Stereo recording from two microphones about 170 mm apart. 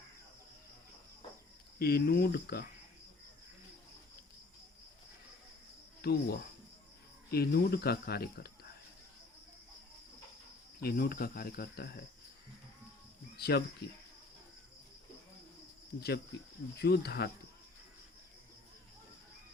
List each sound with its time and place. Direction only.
1.8 s speech: 70° left (ahead or behind)
6.0 s cricket: 65° left (ahead or behind)
7.3 s speech: 70° left (ahead or behind)
10.8 s speech: 60° left (ahead or behind)
13.3 s speech: 70° left (ahead or behind)
16.0 s speech: 70° left (ahead or behind)